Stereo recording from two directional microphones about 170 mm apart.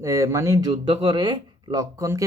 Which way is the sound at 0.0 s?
15° right (ahead or behind).